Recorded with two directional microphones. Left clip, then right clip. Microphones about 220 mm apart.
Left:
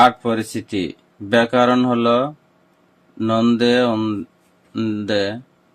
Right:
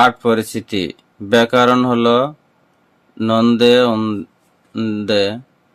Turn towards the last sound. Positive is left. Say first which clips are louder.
# right 4 dB
turn(degrees=-20)  # may be behind; listen again after turning